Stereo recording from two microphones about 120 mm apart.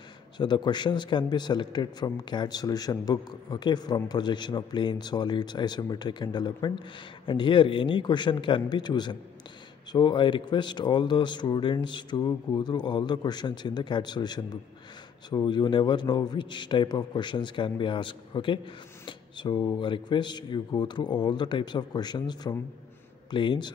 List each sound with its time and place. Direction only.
0.4 s a man's voice: 40° left (ahead or behind)